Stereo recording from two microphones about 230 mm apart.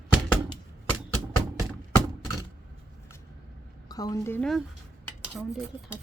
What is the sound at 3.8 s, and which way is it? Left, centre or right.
Speech, centre.